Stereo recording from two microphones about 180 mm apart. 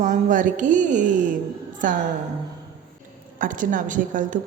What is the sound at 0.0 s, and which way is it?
Speech, 45° right (ahead or behind).